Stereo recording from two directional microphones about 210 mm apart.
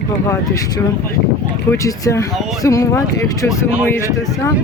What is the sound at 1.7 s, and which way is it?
Speech, 15° left (ahead or behind).